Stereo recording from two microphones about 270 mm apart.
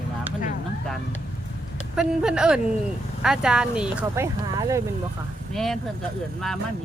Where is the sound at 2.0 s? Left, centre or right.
Centre.